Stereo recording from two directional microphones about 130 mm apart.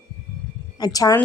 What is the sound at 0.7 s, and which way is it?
Speech, 30° left (ahead or behind).